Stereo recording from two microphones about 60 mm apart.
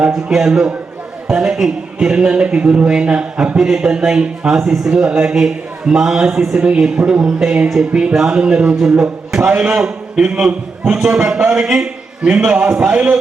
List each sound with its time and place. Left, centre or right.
0.1 s speech: centre
9.5 s a man's voice: right
9.7 s a man's voice: centre